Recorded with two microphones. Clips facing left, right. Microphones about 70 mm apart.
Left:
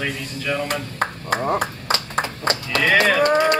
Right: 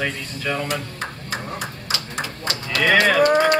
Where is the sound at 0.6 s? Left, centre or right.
Left.